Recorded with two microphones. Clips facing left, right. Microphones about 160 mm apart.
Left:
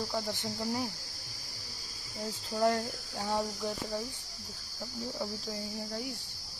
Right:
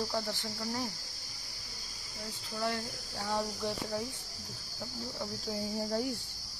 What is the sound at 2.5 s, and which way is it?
Speech, 40° left (ahead or behind).